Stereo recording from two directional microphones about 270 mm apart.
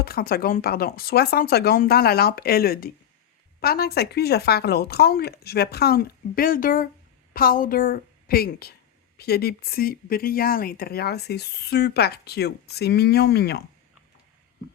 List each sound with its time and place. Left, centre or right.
0.0 s speech: left